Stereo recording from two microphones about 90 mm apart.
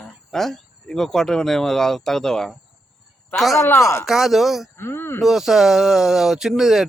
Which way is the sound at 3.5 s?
30° left (ahead or behind).